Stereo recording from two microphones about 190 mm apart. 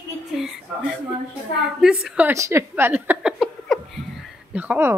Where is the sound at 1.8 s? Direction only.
5° right (ahead or behind).